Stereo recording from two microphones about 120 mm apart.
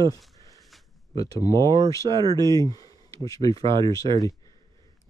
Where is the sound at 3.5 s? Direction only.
50° right (ahead or behind).